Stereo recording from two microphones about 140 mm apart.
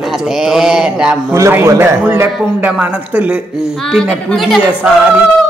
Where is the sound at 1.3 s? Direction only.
20° right (ahead or behind).